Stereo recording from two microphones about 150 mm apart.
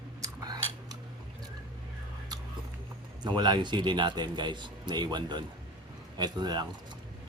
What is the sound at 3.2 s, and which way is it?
A man's voice, 30° right (ahead or behind).